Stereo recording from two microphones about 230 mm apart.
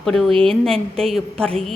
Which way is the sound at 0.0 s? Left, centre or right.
Centre.